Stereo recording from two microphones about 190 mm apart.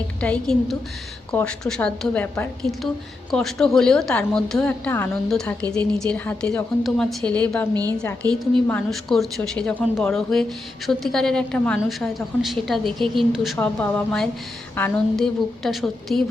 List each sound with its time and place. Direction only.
0.2 s a woman's voice: 5° left (ahead or behind)
7.7 s a woman's voice: 20° right (ahead or behind)
7.9 s a woman's voice: 5° left (ahead or behind)